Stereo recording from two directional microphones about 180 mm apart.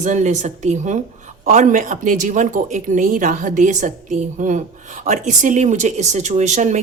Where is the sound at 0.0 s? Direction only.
45° right (ahead or behind).